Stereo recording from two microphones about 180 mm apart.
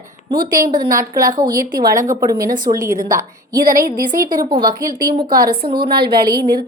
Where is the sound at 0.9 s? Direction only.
50° right (ahead or behind).